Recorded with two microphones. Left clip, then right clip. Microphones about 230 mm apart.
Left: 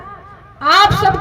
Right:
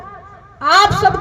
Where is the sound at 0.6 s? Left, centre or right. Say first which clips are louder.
Left 1 dB; left.